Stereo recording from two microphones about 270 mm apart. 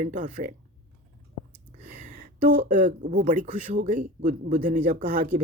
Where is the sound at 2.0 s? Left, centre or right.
Right.